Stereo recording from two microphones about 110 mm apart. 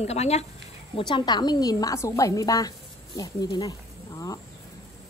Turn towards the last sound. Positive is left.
turn(degrees=35)  # may be behind; listen again after turning